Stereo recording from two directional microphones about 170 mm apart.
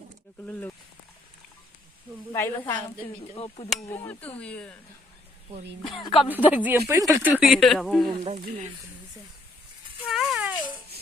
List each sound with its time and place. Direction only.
2.3 s speech: 15° left (ahead or behind)
3.3 s speech: 35° left (ahead or behind)
3.8 s speech: 10° left (ahead or behind)
6.0 s speech: 30° left (ahead or behind)
6.4 s speech: 10° right (ahead or behind)
8.1 s speech: 35° right (ahead or behind)
10.1 s rattle: centre (ahead or behind)